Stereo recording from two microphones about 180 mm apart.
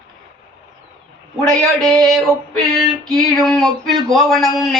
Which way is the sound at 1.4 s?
5° left (ahead or behind).